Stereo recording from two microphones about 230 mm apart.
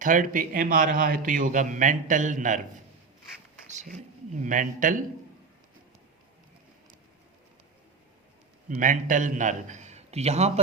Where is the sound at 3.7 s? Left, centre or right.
Right.